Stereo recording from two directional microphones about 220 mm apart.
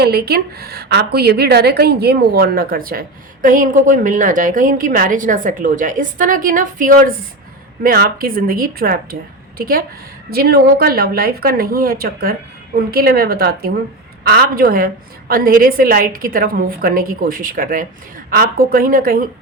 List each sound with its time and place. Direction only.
0.0 s a woman's voice: 45° right (ahead or behind)